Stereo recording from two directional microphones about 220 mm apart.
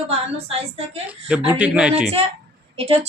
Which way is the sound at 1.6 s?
5° right (ahead or behind).